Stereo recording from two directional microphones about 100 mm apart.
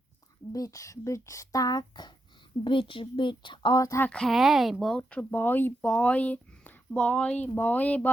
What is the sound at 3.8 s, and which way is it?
Speech, 35° left (ahead or behind).